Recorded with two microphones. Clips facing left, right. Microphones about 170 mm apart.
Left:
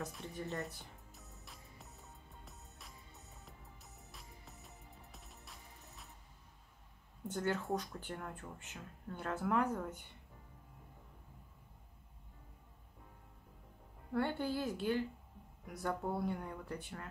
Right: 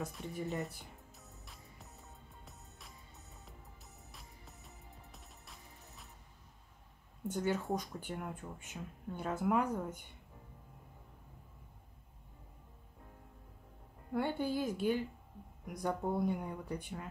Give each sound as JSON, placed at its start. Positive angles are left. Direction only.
{"t": 0.3, "sound": "speech", "side_deg": -10}
{"t": 1.1, "sound": "music", "side_deg": 0}
{"t": 4.1, "sound": "music", "side_deg": 0}
{"t": 7.2, "sound": "speech", "side_deg": -10}
{"t": 14.1, "sound": "speech", "side_deg": -15}